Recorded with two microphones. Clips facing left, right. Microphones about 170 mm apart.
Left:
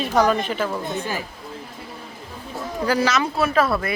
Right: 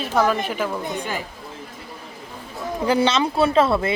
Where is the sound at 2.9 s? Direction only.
25° right (ahead or behind).